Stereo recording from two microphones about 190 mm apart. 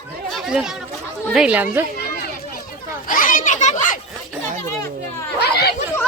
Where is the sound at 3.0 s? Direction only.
45° left (ahead or behind).